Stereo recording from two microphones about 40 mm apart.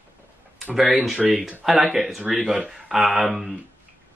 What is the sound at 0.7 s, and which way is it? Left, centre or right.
Speech, centre.